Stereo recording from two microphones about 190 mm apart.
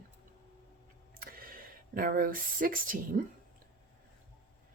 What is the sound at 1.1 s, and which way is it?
Speech, 50° right (ahead or behind).